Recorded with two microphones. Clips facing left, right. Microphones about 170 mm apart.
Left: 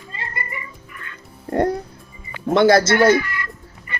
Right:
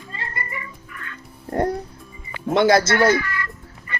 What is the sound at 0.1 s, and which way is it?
Music, 20° left (ahead or behind).